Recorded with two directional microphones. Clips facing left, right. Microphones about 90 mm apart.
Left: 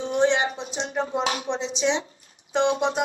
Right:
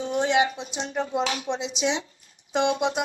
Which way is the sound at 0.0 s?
30° left (ahead or behind).